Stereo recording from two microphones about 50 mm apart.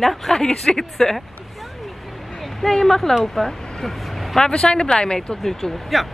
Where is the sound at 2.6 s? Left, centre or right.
Centre.